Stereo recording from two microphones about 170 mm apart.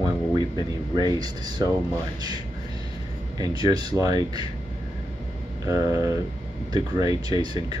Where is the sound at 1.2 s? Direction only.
25° right (ahead or behind).